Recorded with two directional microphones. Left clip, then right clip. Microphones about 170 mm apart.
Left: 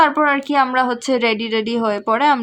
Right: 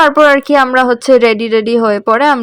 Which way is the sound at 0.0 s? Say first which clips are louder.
Right 8 dB; 30° right (ahead or behind).